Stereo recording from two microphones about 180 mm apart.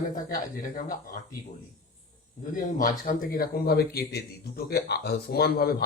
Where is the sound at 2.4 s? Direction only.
45° left (ahead or behind).